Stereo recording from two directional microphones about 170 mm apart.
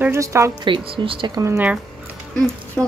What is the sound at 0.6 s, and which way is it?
Speech, 30° right (ahead or behind).